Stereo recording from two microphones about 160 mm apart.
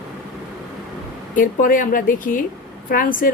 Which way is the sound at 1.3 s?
60° left (ahead or behind).